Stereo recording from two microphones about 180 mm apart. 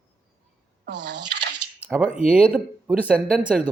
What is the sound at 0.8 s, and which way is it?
Bathtub, 70° right (ahead or behind).